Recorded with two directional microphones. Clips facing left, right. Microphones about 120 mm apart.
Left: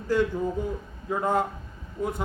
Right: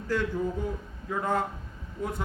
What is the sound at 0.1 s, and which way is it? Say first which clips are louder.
Speech: left 4 dB; 15° left (ahead or behind).